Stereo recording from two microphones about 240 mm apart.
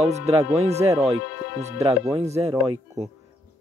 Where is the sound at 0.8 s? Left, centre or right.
Centre.